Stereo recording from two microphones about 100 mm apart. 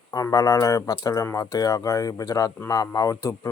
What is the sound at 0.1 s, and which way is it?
Speech, 35° left (ahead or behind).